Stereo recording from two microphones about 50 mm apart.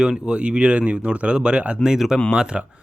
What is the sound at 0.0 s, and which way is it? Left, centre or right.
Speech, centre.